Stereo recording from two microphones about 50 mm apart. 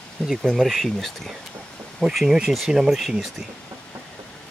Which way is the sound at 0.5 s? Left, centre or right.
Centre.